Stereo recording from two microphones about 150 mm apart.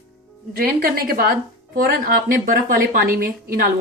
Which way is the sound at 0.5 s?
75° right (ahead or behind).